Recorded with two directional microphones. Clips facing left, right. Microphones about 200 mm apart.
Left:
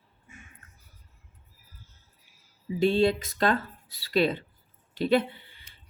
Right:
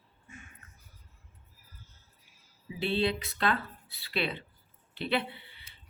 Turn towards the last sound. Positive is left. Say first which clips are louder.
# left 8 dB
turn(degrees=45)  # may be behind; listen again after turning